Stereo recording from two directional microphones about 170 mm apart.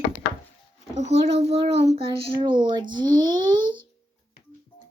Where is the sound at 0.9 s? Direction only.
40° right (ahead or behind).